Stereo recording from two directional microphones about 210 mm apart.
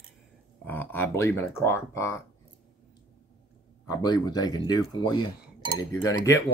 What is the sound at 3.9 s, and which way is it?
Speech, 20° left (ahead or behind).